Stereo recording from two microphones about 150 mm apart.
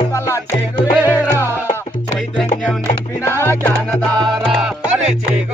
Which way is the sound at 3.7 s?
25° right (ahead or behind).